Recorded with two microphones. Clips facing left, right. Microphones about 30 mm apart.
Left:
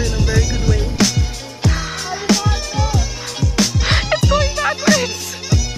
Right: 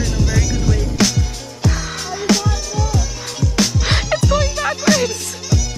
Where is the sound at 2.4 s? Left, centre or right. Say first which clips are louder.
Left 1 dB; left.